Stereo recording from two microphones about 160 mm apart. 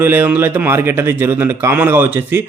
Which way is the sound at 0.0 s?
10° right (ahead or behind).